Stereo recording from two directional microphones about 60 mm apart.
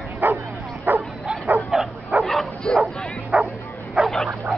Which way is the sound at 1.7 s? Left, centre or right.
Centre.